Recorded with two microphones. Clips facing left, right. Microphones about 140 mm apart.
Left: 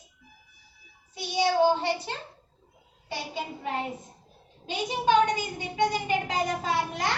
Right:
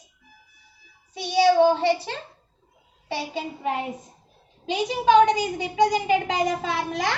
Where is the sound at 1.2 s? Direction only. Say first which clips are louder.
Right 6 dB; 70° right (ahead or behind).